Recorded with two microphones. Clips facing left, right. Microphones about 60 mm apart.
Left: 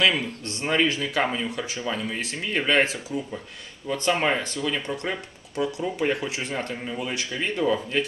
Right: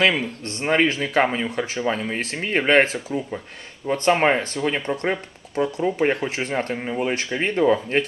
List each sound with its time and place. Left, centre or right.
0.6 s speech: right